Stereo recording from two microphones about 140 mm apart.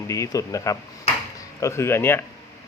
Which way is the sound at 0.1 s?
25° left (ahead or behind).